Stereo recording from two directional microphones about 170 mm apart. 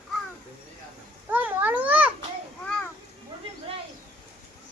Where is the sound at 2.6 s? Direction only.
5° left (ahead or behind).